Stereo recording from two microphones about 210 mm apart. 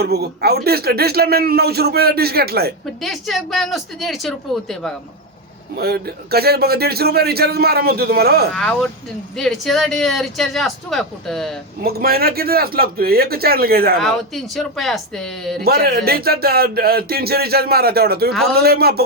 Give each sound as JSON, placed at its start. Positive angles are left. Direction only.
{"t": 0.0, "sound": "speech", "side_deg": -50}
{"t": 3.0, "sound": "speech", "side_deg": 0}
{"t": 5.7, "sound": "speech", "side_deg": -50}
{"t": 8.5, "sound": "speech", "side_deg": 0}
{"t": 11.8, "sound": "speech", "side_deg": -45}
{"t": 14.0, "sound": "speech", "side_deg": 0}
{"t": 15.6, "sound": "speech", "side_deg": -50}